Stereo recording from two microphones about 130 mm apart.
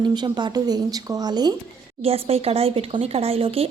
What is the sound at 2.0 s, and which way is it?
Speech, 50° right (ahead or behind).